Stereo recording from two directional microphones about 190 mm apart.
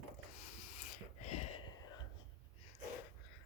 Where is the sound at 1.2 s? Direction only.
35° left (ahead or behind).